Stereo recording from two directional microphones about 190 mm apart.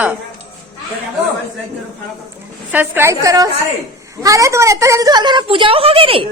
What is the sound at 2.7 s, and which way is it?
A woman's voice, 10° right (ahead or behind).